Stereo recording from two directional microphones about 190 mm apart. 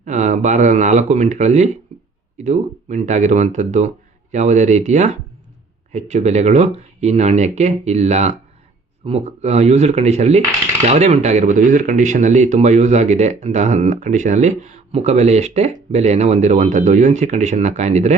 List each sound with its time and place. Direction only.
0.0 s speech: 40° right (ahead or behind)